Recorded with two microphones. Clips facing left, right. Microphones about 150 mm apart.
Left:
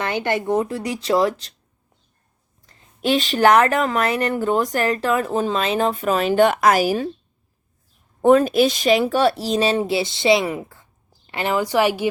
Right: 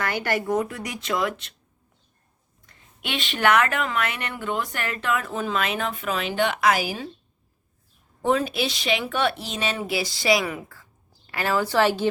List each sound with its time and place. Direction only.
0.0 s speech: 20° left (ahead or behind)
2.6 s speech: 35° left (ahead or behind)
8.2 s a woman's voice: 50° left (ahead or behind); by 12.0 s 15° left (ahead or behind)